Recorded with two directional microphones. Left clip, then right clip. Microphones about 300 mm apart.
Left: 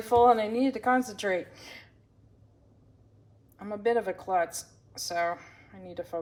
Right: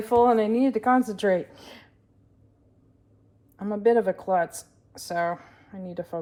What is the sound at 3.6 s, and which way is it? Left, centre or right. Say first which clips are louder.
Speech: right 6 dB; centre.